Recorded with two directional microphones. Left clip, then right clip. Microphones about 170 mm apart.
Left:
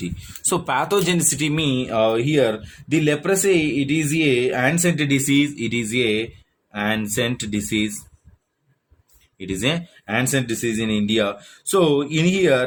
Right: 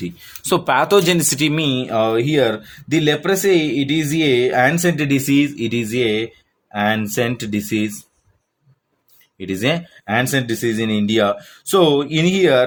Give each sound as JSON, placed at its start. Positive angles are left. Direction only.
{"t": 0.2, "sound": "speech", "side_deg": -25}
{"t": 9.4, "sound": "speech", "side_deg": -30}